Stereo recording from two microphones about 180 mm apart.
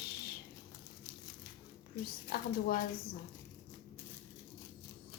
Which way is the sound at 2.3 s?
55° left (ahead or behind).